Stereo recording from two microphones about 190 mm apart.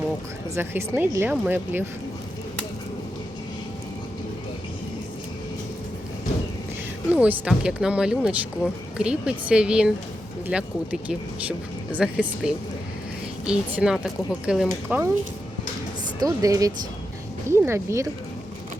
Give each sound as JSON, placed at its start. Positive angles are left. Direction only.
{"t": 0.5, "sound": "speech", "side_deg": -10}
{"t": 7.1, "sound": "speech", "side_deg": -5}
{"t": 16.2, "sound": "speech", "side_deg": -20}